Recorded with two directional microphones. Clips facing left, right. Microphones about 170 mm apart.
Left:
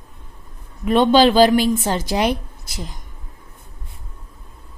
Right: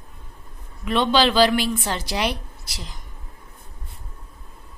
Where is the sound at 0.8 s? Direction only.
45° left (ahead or behind).